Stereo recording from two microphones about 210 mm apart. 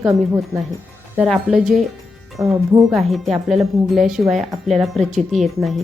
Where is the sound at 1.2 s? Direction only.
Centre (ahead or behind).